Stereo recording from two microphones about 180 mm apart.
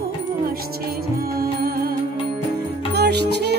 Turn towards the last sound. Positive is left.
turn(degrees=-65)  # may be behind; listen again after turning